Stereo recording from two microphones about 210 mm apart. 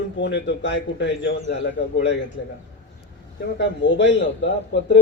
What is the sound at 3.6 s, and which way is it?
A man's voice, 55° left (ahead or behind).